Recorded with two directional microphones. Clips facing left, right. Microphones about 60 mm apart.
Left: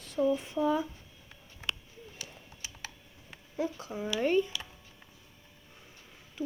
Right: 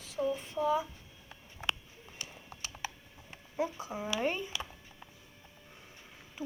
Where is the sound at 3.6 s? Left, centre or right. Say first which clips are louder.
Left 1 dB; centre.